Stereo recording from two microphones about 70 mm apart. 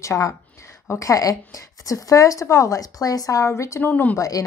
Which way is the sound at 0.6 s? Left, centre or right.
Left.